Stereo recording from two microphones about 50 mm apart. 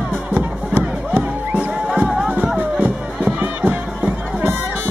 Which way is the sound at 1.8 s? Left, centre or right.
Centre.